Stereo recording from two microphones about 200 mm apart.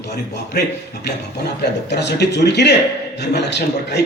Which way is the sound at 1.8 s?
60° left (ahead or behind).